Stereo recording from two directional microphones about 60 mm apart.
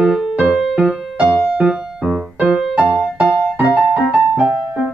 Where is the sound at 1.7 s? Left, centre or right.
Centre.